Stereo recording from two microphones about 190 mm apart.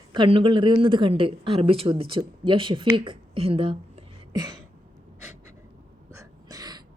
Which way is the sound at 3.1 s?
30° right (ahead or behind).